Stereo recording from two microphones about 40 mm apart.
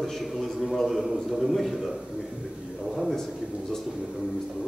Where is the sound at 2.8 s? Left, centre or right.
Centre.